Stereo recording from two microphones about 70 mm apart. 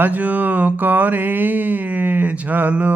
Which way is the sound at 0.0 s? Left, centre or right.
Right.